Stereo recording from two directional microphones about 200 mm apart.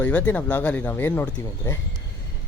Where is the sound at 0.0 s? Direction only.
5° left (ahead or behind).